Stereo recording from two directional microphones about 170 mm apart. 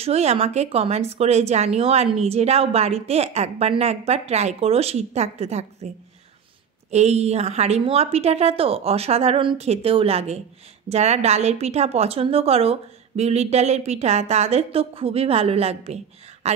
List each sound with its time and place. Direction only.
0.0 s a woman's voice: 40° right (ahead or behind)
6.9 s a woman's voice: 40° right (ahead or behind)